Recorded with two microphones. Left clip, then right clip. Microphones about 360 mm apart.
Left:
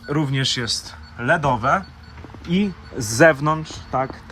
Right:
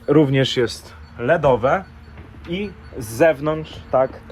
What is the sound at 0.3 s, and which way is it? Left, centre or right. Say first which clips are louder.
Speech: right 3 dB; centre.